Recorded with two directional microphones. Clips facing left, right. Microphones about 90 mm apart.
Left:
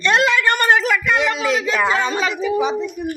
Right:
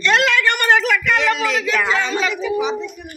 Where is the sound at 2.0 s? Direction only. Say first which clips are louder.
Left 1 dB; 35° left (ahead or behind).